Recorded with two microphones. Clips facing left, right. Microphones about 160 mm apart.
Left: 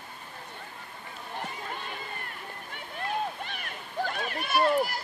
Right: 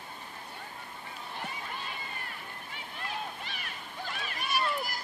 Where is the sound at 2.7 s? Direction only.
55° left (ahead or behind).